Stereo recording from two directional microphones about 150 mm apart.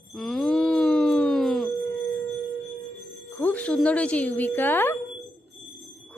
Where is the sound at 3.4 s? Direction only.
10° left (ahead or behind).